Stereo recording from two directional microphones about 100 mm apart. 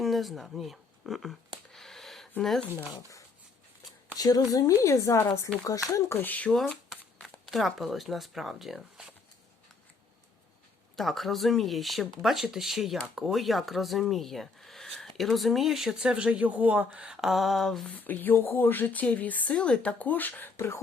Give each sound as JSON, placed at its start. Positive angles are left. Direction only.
{"t": 0.0, "sound": "speech", "side_deg": 0}
{"t": 1.7, "sound": "a sound", "side_deg": 5}
{"t": 2.4, "sound": "speech", "side_deg": 5}
{"t": 4.2, "sound": "speech", "side_deg": 40}
{"t": 6.5, "sound": "speech", "side_deg": 5}
{"t": 10.9, "sound": "speech", "side_deg": 0}
{"t": 17.9, "sound": "speech", "side_deg": 15}